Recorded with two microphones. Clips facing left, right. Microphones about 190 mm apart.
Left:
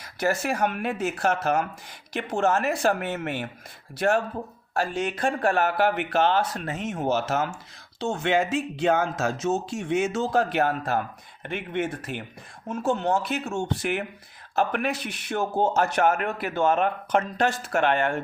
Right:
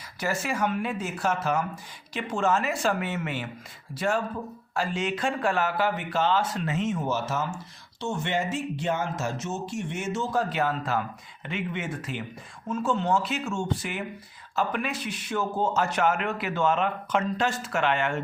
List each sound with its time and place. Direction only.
0.0 s speech: 60° left (ahead or behind)
3.9 s speech: 65° left (ahead or behind)
4.8 s speech: 55° left (ahead or behind)
7.1 s speech: 80° left
8.1 s speech: 90° left; by 13.5 s 60° left (ahead or behind)
14.5 s speech: 65° left (ahead or behind)